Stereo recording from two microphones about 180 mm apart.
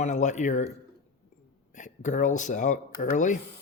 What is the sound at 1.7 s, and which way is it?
Speech, 45° left (ahead or behind).